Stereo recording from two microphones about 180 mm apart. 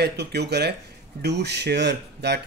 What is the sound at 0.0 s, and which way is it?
Speech, 65° right (ahead or behind).